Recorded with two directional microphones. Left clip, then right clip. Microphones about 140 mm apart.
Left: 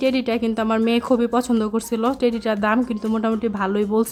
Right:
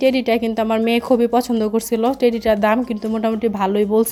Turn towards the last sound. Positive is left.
turn(degrees=-5)  # may be behind; listen again after turning